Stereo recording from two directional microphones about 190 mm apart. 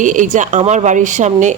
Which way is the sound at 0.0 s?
40° right (ahead or behind).